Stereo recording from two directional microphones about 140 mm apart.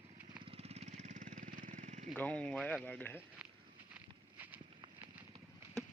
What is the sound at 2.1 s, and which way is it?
Speech, 10° left (ahead or behind).